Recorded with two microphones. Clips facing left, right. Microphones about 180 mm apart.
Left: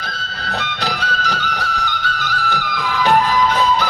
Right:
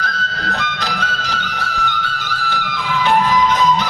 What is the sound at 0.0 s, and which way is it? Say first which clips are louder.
Music: right 5 dB; 30° left (ahead or behind).